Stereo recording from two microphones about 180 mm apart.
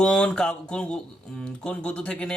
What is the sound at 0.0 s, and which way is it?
Speech, 5° left (ahead or behind).